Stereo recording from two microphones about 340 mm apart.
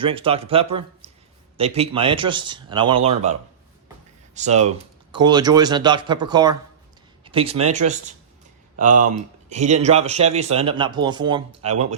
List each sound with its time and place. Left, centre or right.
0.0 s a man's voice: centre
1.0 s a sound: centre
1.5 s a man's voice: centre
4.4 s a man's voice: centre
8.7 s speech: right